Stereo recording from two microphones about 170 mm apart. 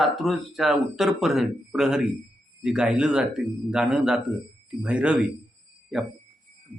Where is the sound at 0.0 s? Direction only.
Centre (ahead or behind).